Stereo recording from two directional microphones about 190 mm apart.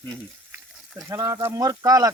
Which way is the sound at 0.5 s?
Centre (ahead or behind).